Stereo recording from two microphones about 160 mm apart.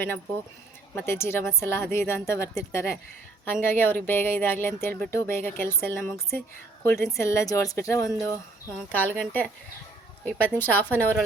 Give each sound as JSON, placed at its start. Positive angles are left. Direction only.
{"t": 0.9, "sound": "speech", "side_deg": 15}
{"t": 10.2, "sound": "speech", "side_deg": 10}